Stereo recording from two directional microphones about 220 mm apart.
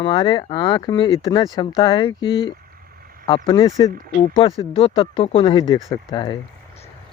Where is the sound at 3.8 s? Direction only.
20° left (ahead or behind).